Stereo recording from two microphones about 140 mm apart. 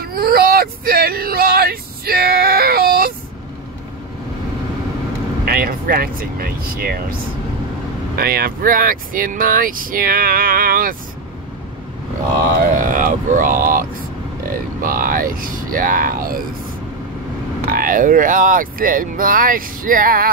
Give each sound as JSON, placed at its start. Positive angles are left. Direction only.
{"t": 0.0, "sound": "a sound", "side_deg": -90}
{"t": 5.4, "sound": "speech", "side_deg": -90}
{"t": 8.2, "sound": "speech", "side_deg": -90}
{"t": 12.7, "sound": "speech", "side_deg": -70}
{"t": 17.6, "sound": "speech", "side_deg": -85}